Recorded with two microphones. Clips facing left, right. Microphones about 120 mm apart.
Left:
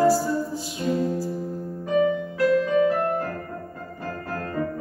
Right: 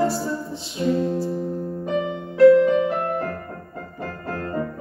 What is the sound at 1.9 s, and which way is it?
Music, 25° right (ahead or behind).